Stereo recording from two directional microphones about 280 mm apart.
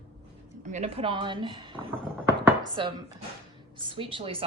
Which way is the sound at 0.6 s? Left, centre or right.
Right.